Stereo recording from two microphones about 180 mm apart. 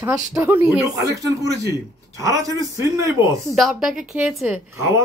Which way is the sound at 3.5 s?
Centre (ahead or behind).